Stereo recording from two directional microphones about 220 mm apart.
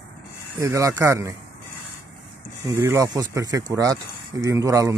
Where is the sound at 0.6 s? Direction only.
15° right (ahead or behind).